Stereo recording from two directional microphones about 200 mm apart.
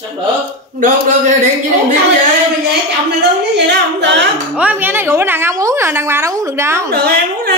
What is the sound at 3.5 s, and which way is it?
Singing, 60° right (ahead or behind).